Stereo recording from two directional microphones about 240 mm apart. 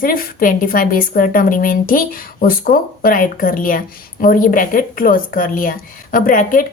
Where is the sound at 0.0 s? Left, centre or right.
Left.